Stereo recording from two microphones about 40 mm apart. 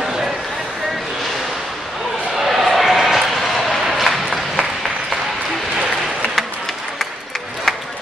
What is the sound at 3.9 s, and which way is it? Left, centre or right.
Applause, centre.